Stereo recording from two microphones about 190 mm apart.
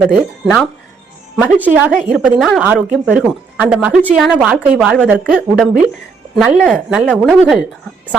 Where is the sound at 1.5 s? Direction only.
10° right (ahead or behind).